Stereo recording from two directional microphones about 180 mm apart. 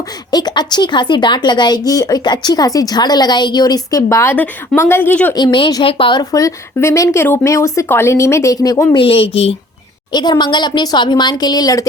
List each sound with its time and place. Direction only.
0.3 s speech: 20° left (ahead or behind)
5.3 s speech: 25° left (ahead or behind)